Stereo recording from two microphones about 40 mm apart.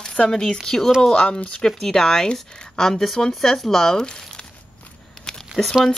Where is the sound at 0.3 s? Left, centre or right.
Centre.